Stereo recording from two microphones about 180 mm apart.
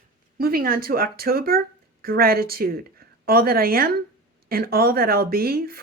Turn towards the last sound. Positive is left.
turn(degrees=-55)  # may be behind; listen again after turning